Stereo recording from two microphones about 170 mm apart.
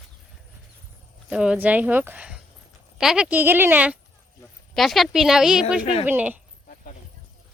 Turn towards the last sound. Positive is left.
turn(degrees=-10)  # may be behind; listen again after turning